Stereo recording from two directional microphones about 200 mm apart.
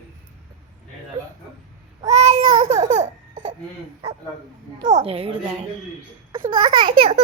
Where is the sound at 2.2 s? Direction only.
30° right (ahead or behind).